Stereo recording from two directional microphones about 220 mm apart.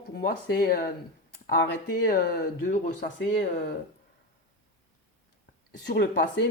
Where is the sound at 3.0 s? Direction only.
55° left (ahead or behind).